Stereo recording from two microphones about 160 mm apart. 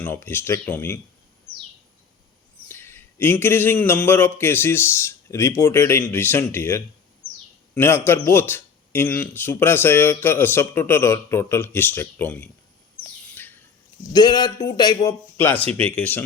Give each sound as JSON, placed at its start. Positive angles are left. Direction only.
{"t": 0.0, "sound": "a man's voice", "side_deg": 15}
{"t": 2.6, "sound": "a man's voice", "side_deg": 15}
{"t": 14.1, "sound": "speech", "side_deg": 25}
{"t": 15.4, "sound": "a man's voice", "side_deg": 10}